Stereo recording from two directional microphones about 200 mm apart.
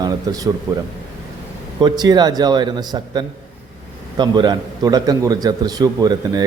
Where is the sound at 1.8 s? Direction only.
20° right (ahead or behind).